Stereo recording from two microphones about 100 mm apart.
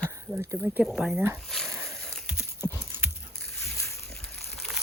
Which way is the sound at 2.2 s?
15° right (ahead or behind).